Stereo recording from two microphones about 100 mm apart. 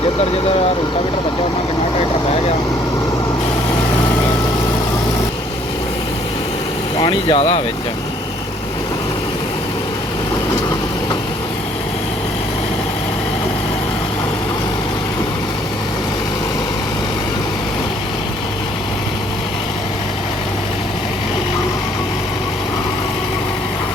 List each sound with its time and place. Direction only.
7.0 s speech: 55° left (ahead or behind)
7.3 s speech: 90° left